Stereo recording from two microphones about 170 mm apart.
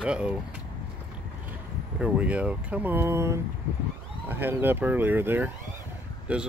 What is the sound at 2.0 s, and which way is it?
Speech, 5° right (ahead or behind).